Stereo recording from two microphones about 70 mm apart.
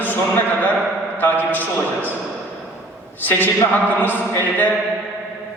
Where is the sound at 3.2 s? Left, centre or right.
Left.